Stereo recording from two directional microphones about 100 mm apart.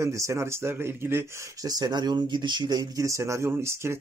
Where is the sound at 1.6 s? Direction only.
40° right (ahead or behind).